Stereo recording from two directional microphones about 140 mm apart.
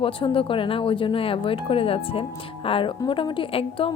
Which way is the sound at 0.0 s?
40° left (ahead or behind).